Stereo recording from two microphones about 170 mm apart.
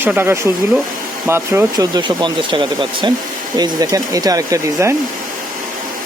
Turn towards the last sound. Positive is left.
turn(degrees=-15)  # may be behind; listen again after turning